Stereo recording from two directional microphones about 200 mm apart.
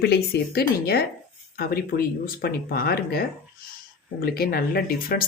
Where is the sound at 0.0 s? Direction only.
55° left (ahead or behind).